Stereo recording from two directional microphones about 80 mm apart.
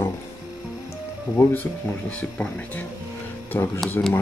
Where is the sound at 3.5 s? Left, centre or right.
Left.